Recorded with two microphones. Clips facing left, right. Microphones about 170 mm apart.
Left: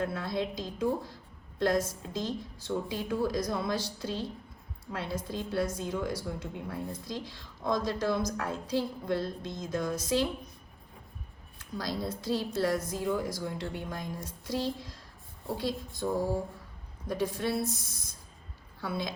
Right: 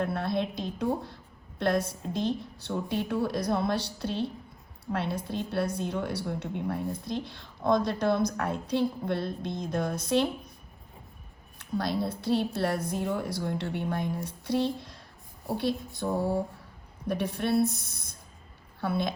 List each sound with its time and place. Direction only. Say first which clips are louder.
0.0 s a woman's voice: right 3 dB; 60° right (ahead or behind)
11.6 s a woman's voice: right 5 dB; 60° right (ahead or behind)